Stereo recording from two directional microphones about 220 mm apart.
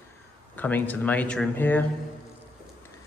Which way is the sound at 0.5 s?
10° left (ahead or behind).